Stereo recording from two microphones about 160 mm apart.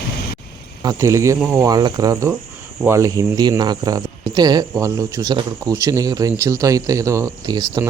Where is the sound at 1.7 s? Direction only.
25° right (ahead or behind).